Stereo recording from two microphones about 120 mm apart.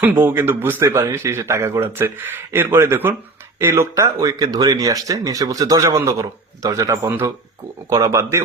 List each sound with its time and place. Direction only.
0.0 s speech: 15° right (ahead or behind)